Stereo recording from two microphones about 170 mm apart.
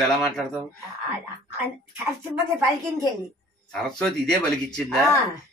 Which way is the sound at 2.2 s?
15° right (ahead or behind).